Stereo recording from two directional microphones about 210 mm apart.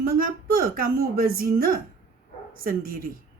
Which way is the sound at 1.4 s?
45° right (ahead or behind).